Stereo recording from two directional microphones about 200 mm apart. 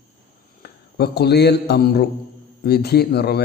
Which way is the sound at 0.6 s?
55° left (ahead or behind).